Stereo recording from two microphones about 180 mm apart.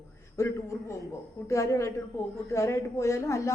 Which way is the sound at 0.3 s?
15° left (ahead or behind).